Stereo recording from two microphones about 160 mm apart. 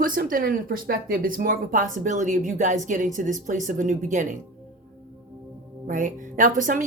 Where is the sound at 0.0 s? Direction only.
60° right (ahead or behind).